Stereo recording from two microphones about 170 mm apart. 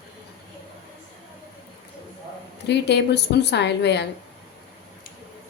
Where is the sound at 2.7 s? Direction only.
90° left.